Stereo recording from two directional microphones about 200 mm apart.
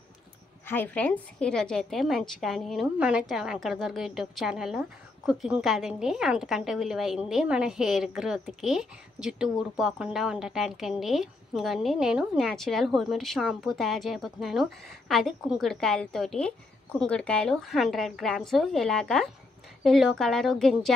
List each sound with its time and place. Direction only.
0.7 s a woman's voice: 10° left (ahead or behind)